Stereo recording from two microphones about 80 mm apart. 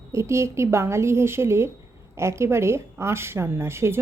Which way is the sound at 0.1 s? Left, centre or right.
Right.